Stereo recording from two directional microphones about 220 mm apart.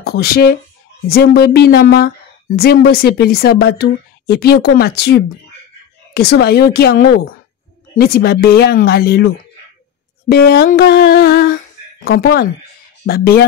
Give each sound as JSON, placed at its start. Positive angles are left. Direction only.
{"t": 0.0, "sound": "a woman's voice", "side_deg": 45}
{"t": 10.2, "sound": "a sound", "side_deg": 45}
{"t": 13.0, "sound": "a woman's voice", "side_deg": 45}